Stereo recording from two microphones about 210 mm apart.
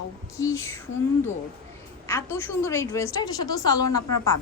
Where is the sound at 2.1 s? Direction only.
10° left (ahead or behind).